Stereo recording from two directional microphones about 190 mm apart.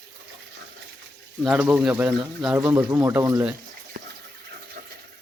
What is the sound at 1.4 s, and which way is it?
Speech, 5° right (ahead or behind).